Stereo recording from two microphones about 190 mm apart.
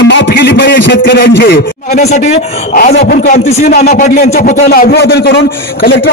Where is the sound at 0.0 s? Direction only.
60° left (ahead or behind).